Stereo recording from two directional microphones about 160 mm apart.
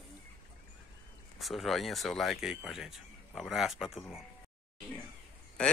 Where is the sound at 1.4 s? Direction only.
Centre (ahead or behind).